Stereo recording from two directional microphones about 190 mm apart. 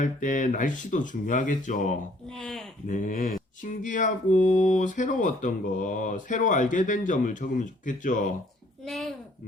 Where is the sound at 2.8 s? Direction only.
45° left (ahead or behind).